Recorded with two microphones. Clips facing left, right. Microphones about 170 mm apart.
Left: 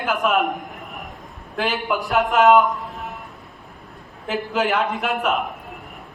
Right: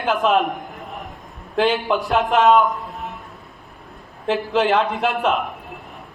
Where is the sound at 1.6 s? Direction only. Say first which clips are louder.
Right 5 dB; 30° right (ahead or behind).